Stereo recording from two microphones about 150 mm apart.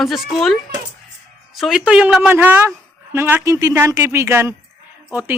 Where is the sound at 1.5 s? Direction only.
Centre (ahead or behind).